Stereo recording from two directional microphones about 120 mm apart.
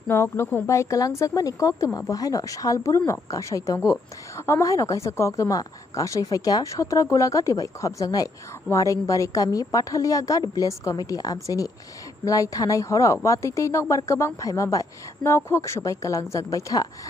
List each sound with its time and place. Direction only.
0.1 s speech: 20° left (ahead or behind)